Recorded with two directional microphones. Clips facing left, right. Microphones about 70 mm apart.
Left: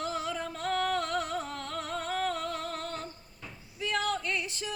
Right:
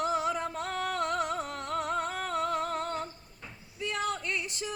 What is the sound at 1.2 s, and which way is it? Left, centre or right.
Music, centre.